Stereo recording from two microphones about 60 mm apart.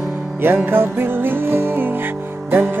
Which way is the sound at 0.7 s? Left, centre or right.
Right.